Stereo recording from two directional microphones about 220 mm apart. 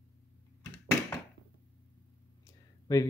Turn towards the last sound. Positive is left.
turn(degrees=15)  # may be behind; listen again after turning